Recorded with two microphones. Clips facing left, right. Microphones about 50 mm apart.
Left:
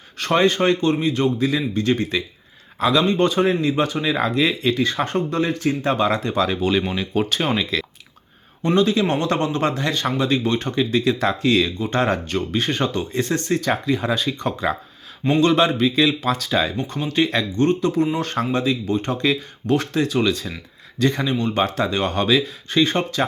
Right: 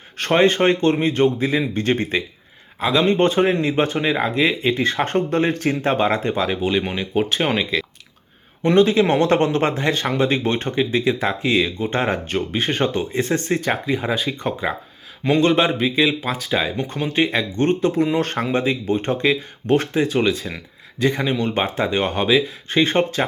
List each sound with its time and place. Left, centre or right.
0.2 s speech: right
2.7 s speech: centre
3.0 s speech: right
4.1 s speech: right
6.4 s speech: centre
7.6 s speech: centre
8.6 s speech: right
17.6 s speech: right